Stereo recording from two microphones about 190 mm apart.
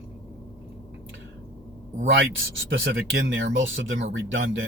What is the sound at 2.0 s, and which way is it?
Speech, 85° right.